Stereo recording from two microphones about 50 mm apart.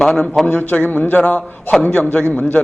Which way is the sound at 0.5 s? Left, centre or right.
Left.